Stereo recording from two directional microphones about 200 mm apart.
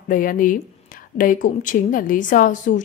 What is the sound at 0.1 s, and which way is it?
A woman's voice, 45° left (ahead or behind).